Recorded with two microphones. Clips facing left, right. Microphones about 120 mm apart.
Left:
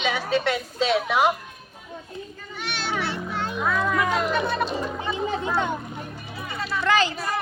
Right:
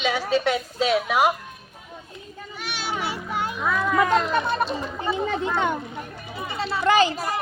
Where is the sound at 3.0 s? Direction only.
10° right (ahead or behind).